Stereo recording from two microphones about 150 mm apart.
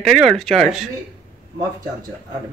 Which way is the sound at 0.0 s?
Centre (ahead or behind).